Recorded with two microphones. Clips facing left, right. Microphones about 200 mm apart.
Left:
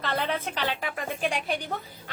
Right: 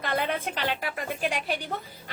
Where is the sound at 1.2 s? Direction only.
Centre (ahead or behind).